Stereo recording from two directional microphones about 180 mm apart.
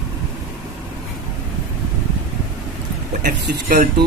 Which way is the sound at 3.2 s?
50° right (ahead or behind).